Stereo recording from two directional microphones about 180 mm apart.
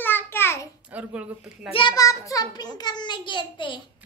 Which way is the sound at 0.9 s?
5° right (ahead or behind).